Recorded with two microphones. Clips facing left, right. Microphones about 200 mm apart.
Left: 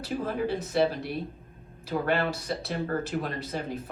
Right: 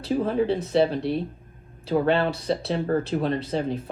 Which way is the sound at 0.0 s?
25° right (ahead or behind).